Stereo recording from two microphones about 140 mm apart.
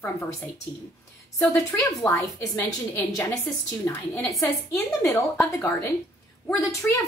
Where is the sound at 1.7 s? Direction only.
15° left (ahead or behind).